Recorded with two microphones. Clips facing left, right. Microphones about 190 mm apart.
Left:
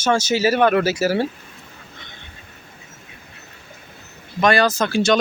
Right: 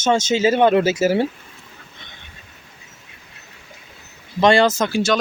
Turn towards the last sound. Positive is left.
turn(degrees=-20)  # may be behind; listen again after turning